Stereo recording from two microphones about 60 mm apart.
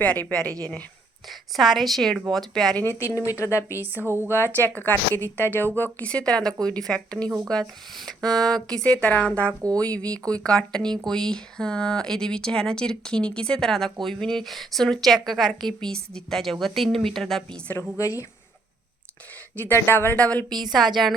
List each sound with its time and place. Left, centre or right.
0.0 s speech: left
1.3 s speech: centre
3.4 s speech: left
3.8 s a woman's voice: right
4.3 s a woman's voice: left
4.6 s a woman's voice: left
6.1 s speech: centre
9.0 s speech: left; by 17.4 s centre
17.9 s speech: left
19.5 s a woman's voice: left
20.1 s speech: left
20.7 s speech: centre